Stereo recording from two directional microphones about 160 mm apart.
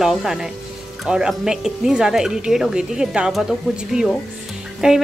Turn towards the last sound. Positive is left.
turn(degrees=-5)  # may be behind; listen again after turning